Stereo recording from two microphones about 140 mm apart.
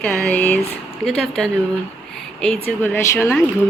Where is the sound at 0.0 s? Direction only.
10° left (ahead or behind).